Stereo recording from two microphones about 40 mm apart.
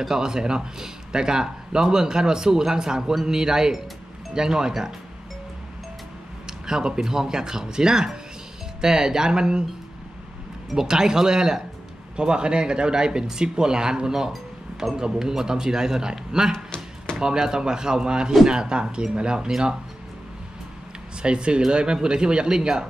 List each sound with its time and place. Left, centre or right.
0.0 s speech: centre
6.4 s speech: centre
10.7 s speech: centre
16.5 s a sound: centre
17.2 s speech: centre
21.2 s speech: right